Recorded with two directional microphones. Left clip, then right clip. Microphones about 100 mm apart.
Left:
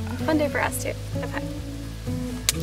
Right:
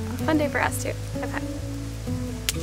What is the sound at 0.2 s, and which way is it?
Speech, 5° right (ahead or behind).